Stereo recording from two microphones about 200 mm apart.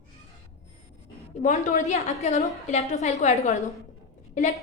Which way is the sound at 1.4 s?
35° left (ahead or behind).